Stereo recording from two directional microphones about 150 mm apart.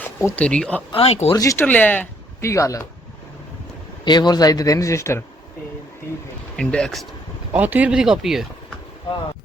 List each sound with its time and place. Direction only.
0.0 s speech: 15° left (ahead or behind)
0.9 s speech: 40° left (ahead or behind)
1.3 s speech: 20° left (ahead or behind)
1.6 s speech: 10° left (ahead or behind)
4.0 s speech: 30° left (ahead or behind)
6.6 s speech: 5° left (ahead or behind)
7.5 s speech: 10° right (ahead or behind)